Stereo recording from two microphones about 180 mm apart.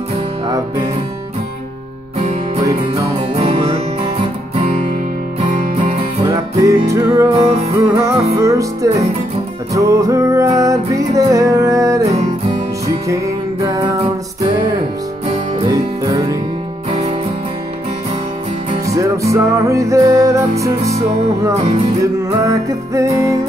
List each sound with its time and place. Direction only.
3.3 s music: 35° right (ahead or behind)
6.2 s music: 15° right (ahead or behind)
7.4 s music: 35° right (ahead or behind)
7.9 s music: 15° right (ahead or behind)
15.6 s music: 20° right (ahead or behind)
18.9 s music: 15° right (ahead or behind)
22.0 s music: 15° right (ahead or behind)